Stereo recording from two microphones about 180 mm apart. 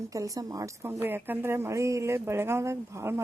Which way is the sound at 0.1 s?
20° right (ahead or behind).